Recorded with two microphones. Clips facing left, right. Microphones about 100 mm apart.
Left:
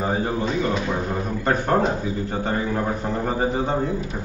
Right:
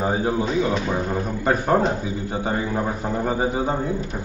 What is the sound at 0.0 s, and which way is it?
Speech, 5° right (ahead or behind).